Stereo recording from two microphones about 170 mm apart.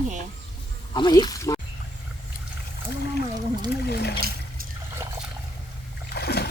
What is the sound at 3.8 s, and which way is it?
Speech, 65° left (ahead or behind).